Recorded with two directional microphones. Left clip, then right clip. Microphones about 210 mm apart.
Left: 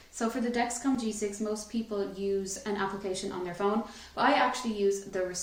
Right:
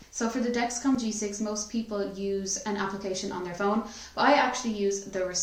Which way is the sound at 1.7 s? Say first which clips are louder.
Right 2 dB; centre (ahead or behind).